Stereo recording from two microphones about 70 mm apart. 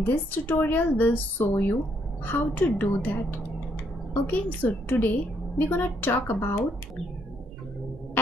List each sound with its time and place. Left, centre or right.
0.1 s speech: left
1.5 s speech: left
2.2 s speech: left